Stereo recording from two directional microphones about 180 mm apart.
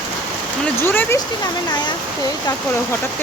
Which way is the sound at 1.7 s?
25° left (ahead or behind).